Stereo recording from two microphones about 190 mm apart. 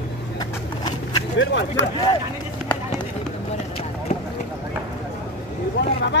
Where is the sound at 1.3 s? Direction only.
70° left (ahead or behind).